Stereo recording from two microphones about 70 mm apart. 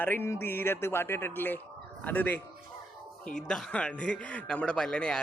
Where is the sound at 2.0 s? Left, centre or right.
Left.